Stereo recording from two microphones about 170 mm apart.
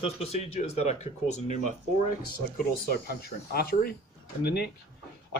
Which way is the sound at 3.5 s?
70° left (ahead or behind).